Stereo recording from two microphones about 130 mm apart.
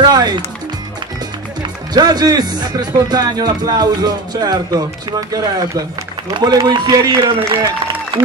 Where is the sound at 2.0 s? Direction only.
30° right (ahead or behind).